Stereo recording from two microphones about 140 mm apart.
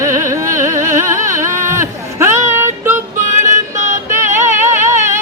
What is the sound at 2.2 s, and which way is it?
Child singing, 20° right (ahead or behind).